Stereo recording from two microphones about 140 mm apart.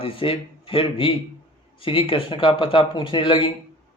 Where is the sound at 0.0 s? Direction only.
40° left (ahead or behind).